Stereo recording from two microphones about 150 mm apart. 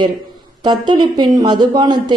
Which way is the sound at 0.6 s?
30° right (ahead or behind).